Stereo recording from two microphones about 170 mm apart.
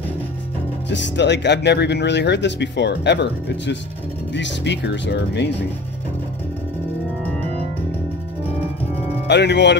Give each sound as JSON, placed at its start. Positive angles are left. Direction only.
{"t": 0.8, "sound": "speech", "side_deg": 90}
{"t": 9.3, "sound": "speech", "side_deg": 90}